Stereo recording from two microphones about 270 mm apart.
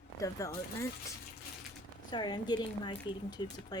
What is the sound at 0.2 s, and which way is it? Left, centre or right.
Speech, centre.